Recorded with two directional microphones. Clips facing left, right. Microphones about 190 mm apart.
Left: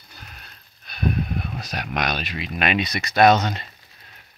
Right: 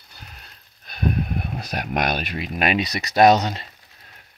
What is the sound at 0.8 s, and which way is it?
Speech, 45° right (ahead or behind).